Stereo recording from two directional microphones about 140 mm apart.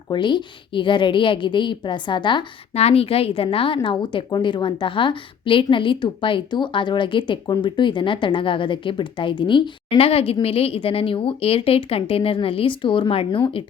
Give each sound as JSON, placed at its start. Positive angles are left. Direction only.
{"t": 0.1, "sound": "a woman's voice", "side_deg": 35}
{"t": 2.7, "sound": "a woman's voice", "side_deg": 45}